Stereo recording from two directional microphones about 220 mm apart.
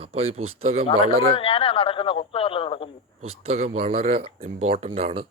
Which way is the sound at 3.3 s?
25° right (ahead or behind).